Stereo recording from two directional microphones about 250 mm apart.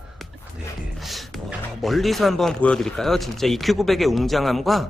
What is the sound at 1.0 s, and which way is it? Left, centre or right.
Speech, centre.